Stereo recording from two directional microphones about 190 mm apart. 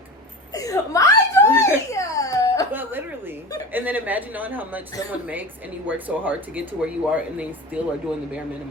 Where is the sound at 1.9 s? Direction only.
15° left (ahead or behind).